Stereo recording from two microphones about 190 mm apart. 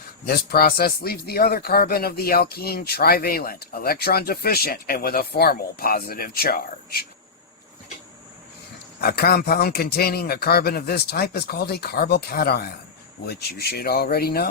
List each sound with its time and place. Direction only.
0.3 s a man's voice: 55° left (ahead or behind)
9.0 s a man's voice: 55° left (ahead or behind)